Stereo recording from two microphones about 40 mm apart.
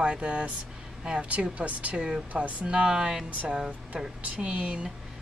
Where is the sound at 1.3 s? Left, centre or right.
Right.